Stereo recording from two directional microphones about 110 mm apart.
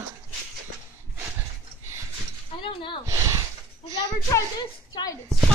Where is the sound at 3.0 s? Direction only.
30° right (ahead or behind).